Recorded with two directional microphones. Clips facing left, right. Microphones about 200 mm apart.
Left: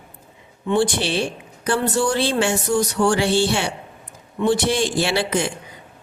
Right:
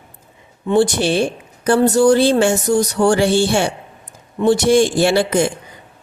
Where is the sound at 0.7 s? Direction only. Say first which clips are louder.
Right 5 dB; 40° right (ahead or behind).